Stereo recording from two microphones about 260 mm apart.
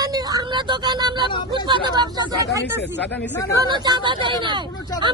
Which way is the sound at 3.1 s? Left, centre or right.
Centre.